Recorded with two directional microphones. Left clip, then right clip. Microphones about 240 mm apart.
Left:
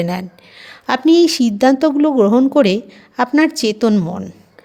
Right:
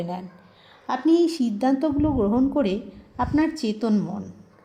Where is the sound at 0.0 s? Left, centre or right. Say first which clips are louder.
Left 10 dB; left.